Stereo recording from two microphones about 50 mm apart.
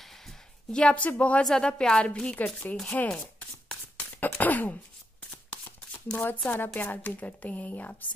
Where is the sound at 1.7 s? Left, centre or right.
Centre.